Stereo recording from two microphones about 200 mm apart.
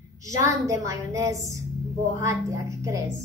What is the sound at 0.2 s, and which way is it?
Speech, 15° right (ahead or behind).